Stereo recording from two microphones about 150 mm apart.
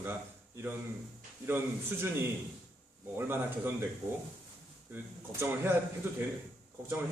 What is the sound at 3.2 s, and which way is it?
Speech, 15° right (ahead or behind).